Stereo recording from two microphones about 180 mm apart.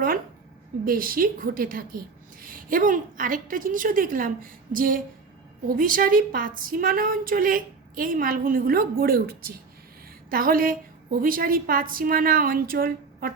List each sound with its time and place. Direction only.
0.9 s a woman's voice: 50° right (ahead or behind)